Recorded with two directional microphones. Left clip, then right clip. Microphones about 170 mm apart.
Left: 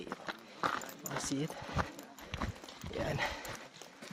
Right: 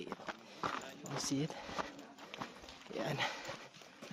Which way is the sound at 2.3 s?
75° left (ahead or behind).